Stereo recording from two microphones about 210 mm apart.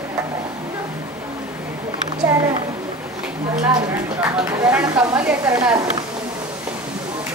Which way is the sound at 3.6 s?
15° right (ahead or behind).